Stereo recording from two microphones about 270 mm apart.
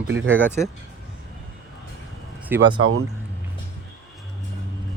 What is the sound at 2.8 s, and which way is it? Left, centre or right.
Speech, right.